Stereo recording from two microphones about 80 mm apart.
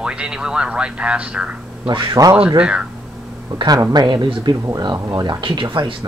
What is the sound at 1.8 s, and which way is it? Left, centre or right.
Speech, right.